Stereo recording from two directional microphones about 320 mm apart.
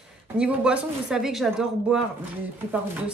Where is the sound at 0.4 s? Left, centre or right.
Centre.